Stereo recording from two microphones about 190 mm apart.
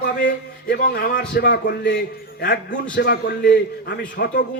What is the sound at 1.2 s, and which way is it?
A man's voice, 65° left (ahead or behind).